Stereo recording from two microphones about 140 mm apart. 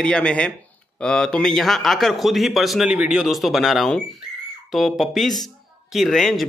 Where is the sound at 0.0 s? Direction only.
5° left (ahead or behind).